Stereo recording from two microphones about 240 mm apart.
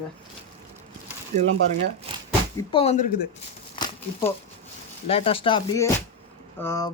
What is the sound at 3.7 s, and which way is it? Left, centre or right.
Crumpling, centre.